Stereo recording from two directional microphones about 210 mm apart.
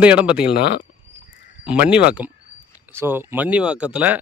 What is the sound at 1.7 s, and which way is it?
A man's voice, 5° right (ahead or behind).